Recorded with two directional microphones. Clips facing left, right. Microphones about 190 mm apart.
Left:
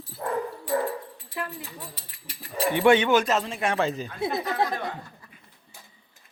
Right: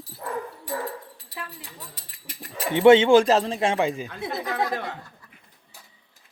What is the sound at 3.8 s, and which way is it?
Speech, 10° right (ahead or behind).